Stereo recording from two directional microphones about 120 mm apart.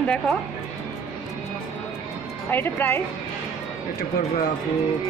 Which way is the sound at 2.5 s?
15° left (ahead or behind).